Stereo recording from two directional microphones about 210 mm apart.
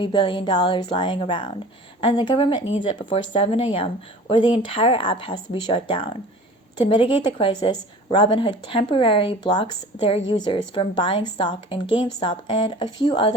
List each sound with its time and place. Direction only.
0.0 s a woman's voice: 25° left (ahead or behind)